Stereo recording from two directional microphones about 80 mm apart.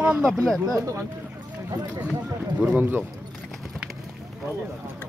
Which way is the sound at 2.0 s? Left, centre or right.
Centre.